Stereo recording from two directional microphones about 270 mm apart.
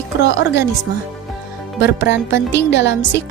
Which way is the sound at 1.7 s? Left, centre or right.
Left.